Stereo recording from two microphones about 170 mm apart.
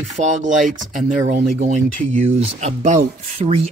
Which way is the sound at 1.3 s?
45° right (ahead or behind).